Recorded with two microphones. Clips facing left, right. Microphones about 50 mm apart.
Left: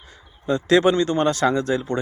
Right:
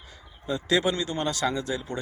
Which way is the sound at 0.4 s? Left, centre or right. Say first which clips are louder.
Left 8 dB; left.